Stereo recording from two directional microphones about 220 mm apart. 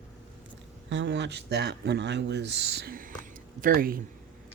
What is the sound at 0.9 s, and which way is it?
Speech, 55° right (ahead or behind).